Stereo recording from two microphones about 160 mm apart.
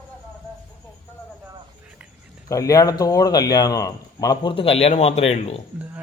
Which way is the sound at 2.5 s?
20° left (ahead or behind).